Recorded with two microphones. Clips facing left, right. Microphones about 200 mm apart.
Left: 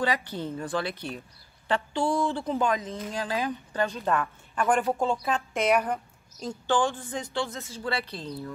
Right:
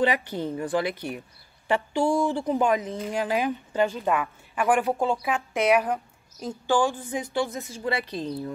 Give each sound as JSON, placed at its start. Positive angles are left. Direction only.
{"t": 0.0, "sound": "speech", "side_deg": -15}